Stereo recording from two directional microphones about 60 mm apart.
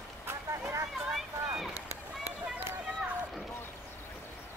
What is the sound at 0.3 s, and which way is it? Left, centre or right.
Vehicle, right.